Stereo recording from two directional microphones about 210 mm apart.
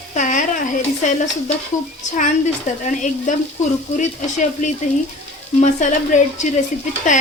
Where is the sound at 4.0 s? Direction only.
35° left (ahead or behind).